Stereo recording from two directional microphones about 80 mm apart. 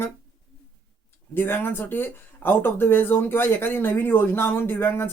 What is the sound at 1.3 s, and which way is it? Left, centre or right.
Speech, left.